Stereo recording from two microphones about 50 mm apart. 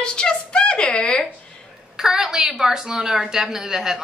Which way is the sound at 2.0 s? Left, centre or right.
Centre.